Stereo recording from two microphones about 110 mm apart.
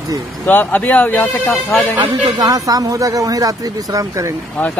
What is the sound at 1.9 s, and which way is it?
Speech, 35° right (ahead or behind).